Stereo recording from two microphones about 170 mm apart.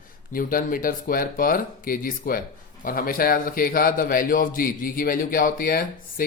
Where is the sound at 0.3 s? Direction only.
55° left (ahead or behind).